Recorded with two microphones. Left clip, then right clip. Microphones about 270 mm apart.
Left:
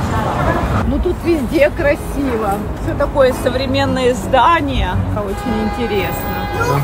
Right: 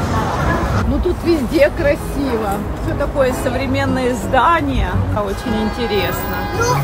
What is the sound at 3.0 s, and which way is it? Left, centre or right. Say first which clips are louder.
Speech: left 4 dB; centre.